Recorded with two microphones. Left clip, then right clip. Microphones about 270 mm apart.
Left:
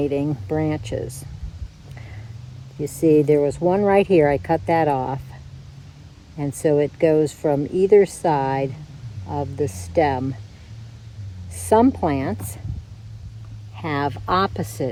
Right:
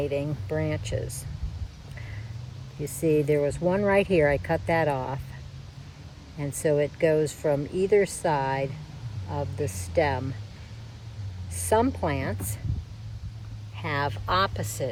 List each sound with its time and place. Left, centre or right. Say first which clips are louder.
0.2 s speech: left 6 dB; centre
3.0 s speech: left 7 dB; centre
6.6 s speech: left 5 dB; centre
11.7 s speech: left 7 dB; centre
13.7 s speech: left 5 dB; centre